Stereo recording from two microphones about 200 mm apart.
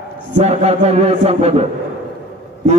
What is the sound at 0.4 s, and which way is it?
A man's voice, 30° right (ahead or behind).